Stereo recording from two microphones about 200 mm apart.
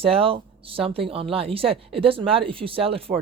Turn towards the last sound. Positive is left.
turn(degrees=-30)  # may be behind; listen again after turning